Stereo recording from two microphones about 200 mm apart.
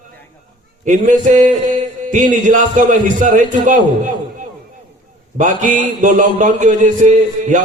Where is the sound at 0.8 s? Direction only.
40° right (ahead or behind).